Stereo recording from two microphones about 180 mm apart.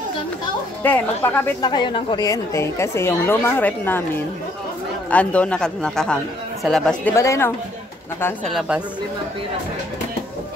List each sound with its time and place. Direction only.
0.8 s a woman's voice: 10° left (ahead or behind)
1.6 s a woman's voice: 25° left (ahead or behind); by 7.2 s 5° left (ahead or behind)
7.2 s a woman's voice: 15° left (ahead or behind)
8.5 s speech: 5° right (ahead or behind)